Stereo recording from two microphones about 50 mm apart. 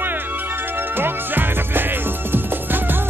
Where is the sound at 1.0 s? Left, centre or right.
Right.